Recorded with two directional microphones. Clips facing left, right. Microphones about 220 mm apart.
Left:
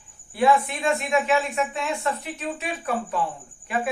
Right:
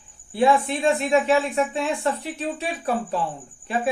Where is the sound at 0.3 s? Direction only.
30° right (ahead or behind).